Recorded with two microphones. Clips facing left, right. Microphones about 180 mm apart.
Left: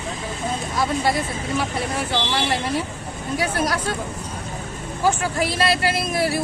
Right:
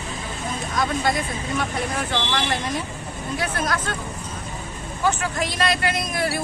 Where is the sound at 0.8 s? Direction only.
30° left (ahead or behind).